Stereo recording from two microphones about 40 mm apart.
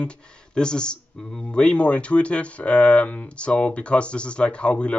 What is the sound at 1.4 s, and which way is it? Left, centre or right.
Speech, left.